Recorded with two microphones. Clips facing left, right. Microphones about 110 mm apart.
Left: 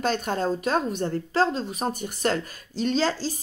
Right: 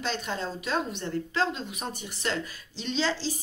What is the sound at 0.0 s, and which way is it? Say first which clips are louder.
A woman's voice: left 7 dB; 50° left (ahead or behind).